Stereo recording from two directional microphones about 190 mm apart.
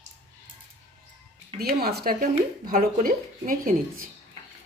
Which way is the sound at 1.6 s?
55° right (ahead or behind).